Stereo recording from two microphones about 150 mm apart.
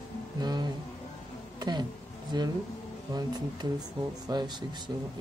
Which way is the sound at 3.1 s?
25° right (ahead or behind).